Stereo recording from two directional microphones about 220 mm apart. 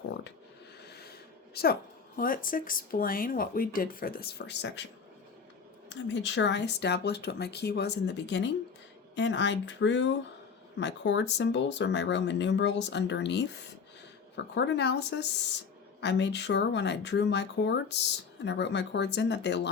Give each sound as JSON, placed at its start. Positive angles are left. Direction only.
{"t": 0.9, "sound": "a sound", "side_deg": 45}
{"t": 1.5, "sound": "speech", "side_deg": 45}
{"t": 5.9, "sound": "speech", "side_deg": 55}